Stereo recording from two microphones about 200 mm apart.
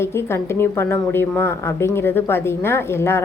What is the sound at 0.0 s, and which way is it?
A woman's voice, 10° left (ahead or behind).